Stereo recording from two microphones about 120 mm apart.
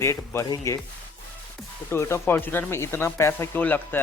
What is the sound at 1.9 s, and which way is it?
Speech, 25° left (ahead or behind).